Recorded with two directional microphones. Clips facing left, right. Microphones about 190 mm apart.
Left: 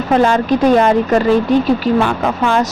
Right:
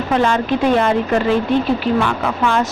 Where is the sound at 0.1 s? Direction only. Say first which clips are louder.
Left 4 dB; 40° left (ahead or behind).